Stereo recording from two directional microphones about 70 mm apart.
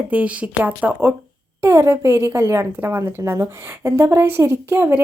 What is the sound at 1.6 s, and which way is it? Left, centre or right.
A woman's voice, right.